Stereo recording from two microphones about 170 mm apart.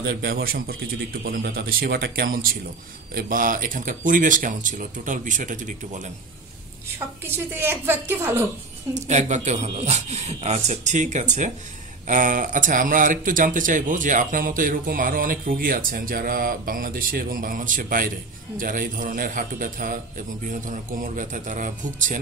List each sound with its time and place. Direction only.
0.0 s a man's voice: 80° right; by 6.0 s 45° right (ahead or behind)
7.2 s a woman's voice: 15° right (ahead or behind)
8.9 s a man's voice: 45° right (ahead or behind)